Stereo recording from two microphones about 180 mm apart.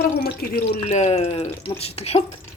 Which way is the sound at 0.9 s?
40° left (ahead or behind).